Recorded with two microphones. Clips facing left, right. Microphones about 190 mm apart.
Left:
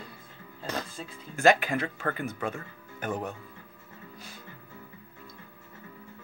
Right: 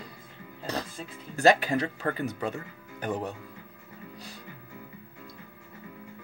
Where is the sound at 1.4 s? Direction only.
35° right (ahead or behind).